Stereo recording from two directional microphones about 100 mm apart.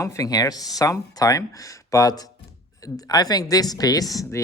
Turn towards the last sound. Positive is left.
turn(degrees=30)  # may be behind; listen again after turning